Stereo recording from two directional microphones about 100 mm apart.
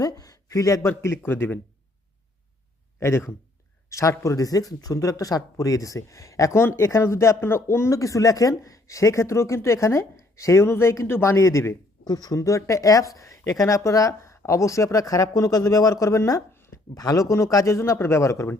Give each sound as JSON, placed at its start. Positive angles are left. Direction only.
{"t": 0.0, "sound": "speech", "side_deg": 35}
{"t": 0.9, "sound": "a man's voice", "side_deg": 25}
{"t": 3.0, "sound": "a man's voice", "side_deg": 30}
{"t": 12.0, "sound": "speech", "side_deg": 40}